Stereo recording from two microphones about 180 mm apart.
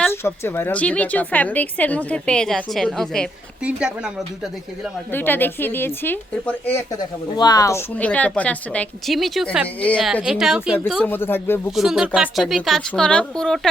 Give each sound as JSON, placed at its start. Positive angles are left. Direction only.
{"t": 0.0, "sound": "a woman's voice", "side_deg": 15}
{"t": 5.1, "sound": "a woman's voice", "side_deg": 10}
{"t": 7.3, "sound": "speech", "side_deg": 20}
{"t": 7.9, "sound": "a woman's voice", "side_deg": 10}
{"t": 11.0, "sound": "a woman's voice", "side_deg": 10}
{"t": 11.7, "sound": "speech", "side_deg": 0}